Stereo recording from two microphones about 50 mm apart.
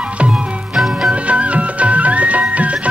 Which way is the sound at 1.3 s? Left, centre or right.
Right.